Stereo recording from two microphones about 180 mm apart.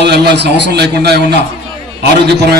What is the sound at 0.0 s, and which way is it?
A man's voice, 65° right (ahead or behind).